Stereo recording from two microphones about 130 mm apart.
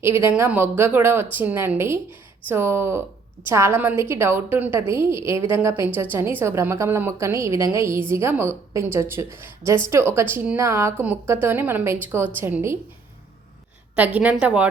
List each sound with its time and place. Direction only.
0.0 s a woman's voice: 15° right (ahead or behind)
13.9 s speech: 10° right (ahead or behind)